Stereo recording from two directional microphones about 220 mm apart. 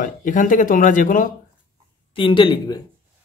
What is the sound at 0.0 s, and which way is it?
Speech, 35° left (ahead or behind).